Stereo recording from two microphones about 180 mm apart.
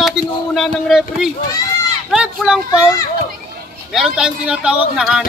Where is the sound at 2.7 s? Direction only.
20° left (ahead or behind).